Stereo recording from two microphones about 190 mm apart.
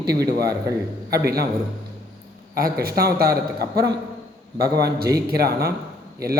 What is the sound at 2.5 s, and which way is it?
A man's voice, 50° right (ahead or behind).